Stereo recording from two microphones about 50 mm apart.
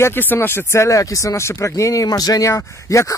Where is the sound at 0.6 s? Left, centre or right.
Left.